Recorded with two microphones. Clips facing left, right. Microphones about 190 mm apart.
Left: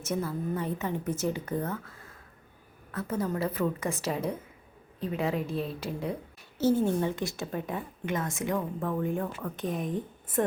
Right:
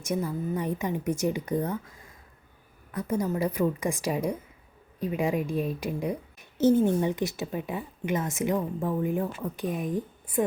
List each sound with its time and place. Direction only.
0.0 s a woman's voice: 15° right (ahead or behind)
9.6 s speech: 5° right (ahead or behind)